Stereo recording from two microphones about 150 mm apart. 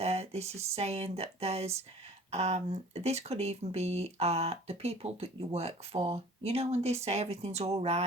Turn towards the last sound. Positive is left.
turn(degrees=-45)  # may be behind; listen again after turning